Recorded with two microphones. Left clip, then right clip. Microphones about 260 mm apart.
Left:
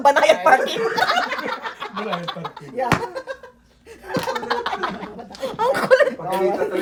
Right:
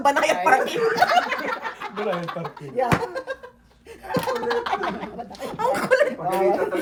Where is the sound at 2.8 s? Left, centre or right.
Centre.